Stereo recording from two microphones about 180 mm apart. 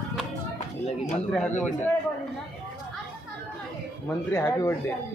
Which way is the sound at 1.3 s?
10° left (ahead or behind).